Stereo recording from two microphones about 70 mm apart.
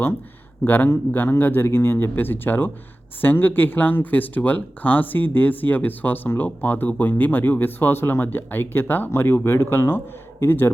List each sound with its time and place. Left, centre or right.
0.6 s a man's voice: left